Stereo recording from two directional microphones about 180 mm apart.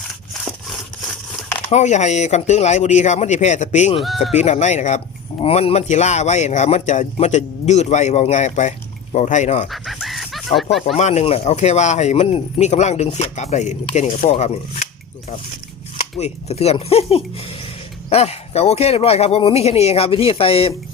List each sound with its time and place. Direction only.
1.7 s speech: 40° left (ahead or behind)
4.0 s speech: centre (ahead or behind)
4.4 s speech: 40° left (ahead or behind)
9.6 s dog: centre (ahead or behind)
10.9 s speech: 35° left (ahead or behind)
16.1 s speech: 35° left (ahead or behind)